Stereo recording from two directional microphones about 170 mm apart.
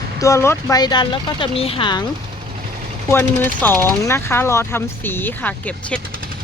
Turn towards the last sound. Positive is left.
turn(degrees=10)  # may be behind; listen again after turning